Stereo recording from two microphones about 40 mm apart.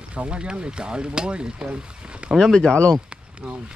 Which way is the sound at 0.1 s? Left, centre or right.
Right.